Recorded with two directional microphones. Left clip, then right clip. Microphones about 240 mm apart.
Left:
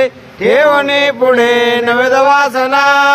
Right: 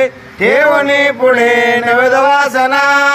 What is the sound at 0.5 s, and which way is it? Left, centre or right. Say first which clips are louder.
Mantra: left 1 dB; centre.